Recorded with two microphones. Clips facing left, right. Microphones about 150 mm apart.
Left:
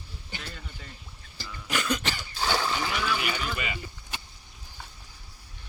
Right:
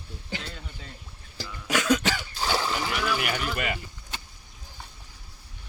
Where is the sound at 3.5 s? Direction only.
60° right (ahead or behind).